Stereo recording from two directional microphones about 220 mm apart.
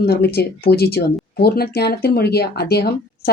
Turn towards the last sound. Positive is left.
turn(degrees=45)  # may be behind; listen again after turning